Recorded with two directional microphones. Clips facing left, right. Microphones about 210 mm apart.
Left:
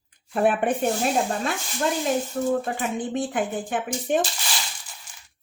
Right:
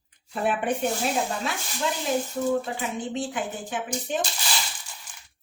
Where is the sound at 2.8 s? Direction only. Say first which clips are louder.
Left 3 dB; 55° left (ahead or behind).